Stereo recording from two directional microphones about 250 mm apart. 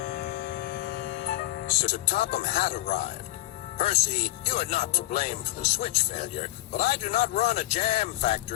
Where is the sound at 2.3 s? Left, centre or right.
Left.